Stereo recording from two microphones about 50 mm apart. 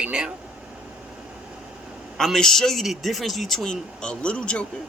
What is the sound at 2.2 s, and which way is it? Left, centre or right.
Speech, centre.